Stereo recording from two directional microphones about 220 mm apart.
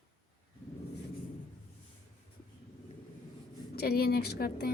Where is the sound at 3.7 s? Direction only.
45° left (ahead or behind).